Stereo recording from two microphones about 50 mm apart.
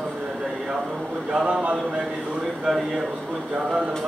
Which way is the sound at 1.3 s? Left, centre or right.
Centre.